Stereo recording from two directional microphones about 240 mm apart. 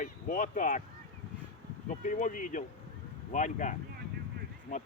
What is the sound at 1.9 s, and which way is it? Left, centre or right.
Speech, left.